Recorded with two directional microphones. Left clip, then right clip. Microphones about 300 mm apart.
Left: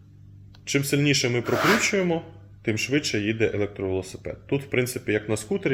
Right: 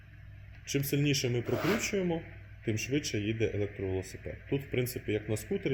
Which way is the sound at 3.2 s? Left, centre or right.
Left.